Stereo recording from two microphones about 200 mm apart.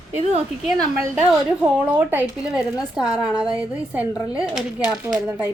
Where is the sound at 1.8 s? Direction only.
10° right (ahead or behind).